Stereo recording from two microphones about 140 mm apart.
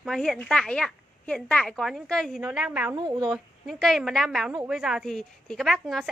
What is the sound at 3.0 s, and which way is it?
Speech, 30° right (ahead or behind).